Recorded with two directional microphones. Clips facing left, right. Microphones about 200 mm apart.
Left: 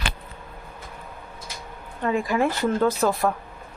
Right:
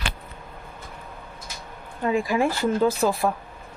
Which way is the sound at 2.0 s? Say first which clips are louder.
Even; 10° right (ahead or behind).